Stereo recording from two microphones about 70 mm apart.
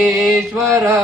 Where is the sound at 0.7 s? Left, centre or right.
Right.